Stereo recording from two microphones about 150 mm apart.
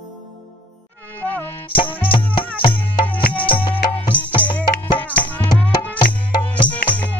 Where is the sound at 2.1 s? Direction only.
35° left (ahead or behind).